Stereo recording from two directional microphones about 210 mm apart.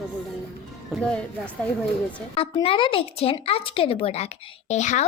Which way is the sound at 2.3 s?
25° left (ahead or behind).